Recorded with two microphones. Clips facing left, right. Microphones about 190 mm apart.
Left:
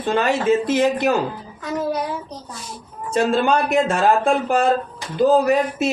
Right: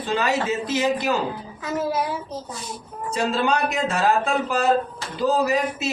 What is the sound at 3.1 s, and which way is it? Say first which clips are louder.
Speech: left 5 dB; 50° left (ahead or behind).